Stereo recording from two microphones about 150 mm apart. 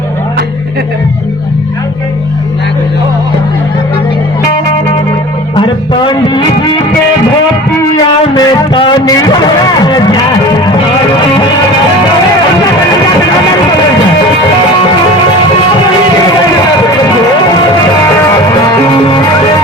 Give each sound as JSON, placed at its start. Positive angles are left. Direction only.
{"t": 5.5, "sound": "music", "side_deg": 35}
{"t": 8.4, "sound": "a sound", "side_deg": 30}
{"t": 9.8, "sound": "music", "side_deg": 30}